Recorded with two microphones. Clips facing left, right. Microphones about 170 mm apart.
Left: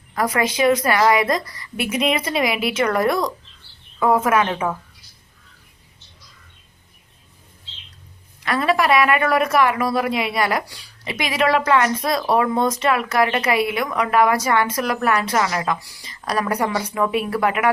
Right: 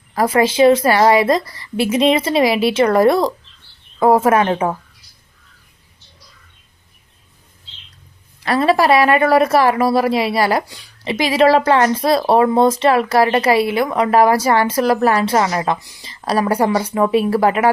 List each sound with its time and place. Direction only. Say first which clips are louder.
0.1 s a woman's voice: right 6 dB; 30° right (ahead or behind)
8.4 s speech: right 5 dB; 35° right (ahead or behind)